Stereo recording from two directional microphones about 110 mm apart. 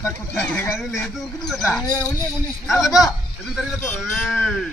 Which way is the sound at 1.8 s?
35° left (ahead or behind).